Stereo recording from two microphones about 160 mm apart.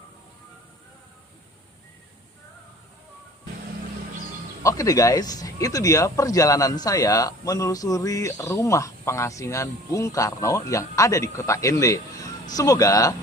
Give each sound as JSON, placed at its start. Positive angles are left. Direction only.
{"t": 4.6, "sound": "speech", "side_deg": 20}